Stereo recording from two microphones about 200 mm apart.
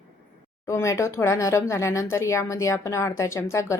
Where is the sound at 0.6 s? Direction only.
15° left (ahead or behind).